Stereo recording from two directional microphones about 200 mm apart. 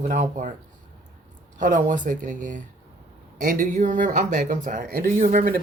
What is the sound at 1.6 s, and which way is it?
Speech, 40° right (ahead or behind).